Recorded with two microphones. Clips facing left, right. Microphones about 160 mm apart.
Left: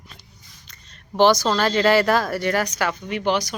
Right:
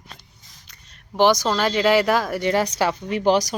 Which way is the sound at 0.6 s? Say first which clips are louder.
Left 2 dB; 10° right (ahead or behind).